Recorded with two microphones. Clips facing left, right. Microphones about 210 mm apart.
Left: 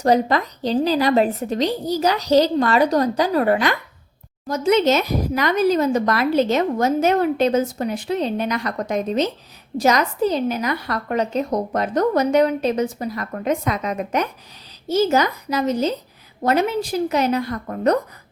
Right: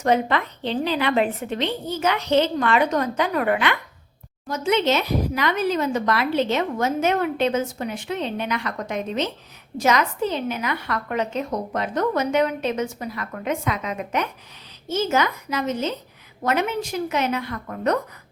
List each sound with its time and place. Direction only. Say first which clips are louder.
0.0 s speech: left 3 dB; 35° left (ahead or behind)